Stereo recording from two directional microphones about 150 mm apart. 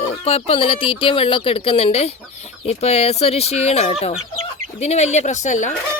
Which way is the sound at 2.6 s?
45° left (ahead or behind).